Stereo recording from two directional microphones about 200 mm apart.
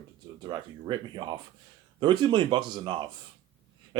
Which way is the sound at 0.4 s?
25° right (ahead or behind).